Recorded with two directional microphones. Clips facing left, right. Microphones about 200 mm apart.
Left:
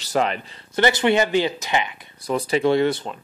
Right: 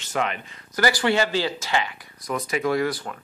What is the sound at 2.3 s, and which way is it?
Speech, 30° left (ahead or behind).